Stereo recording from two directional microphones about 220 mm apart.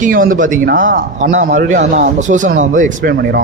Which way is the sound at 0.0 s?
40° right (ahead or behind).